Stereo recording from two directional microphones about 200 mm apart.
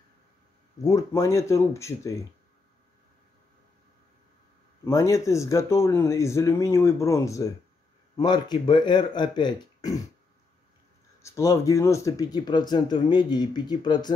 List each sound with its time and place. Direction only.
0.8 s speech: 15° left (ahead or behind)
4.8 s speech: 15° left (ahead or behind)
11.2 s speech: 15° left (ahead or behind)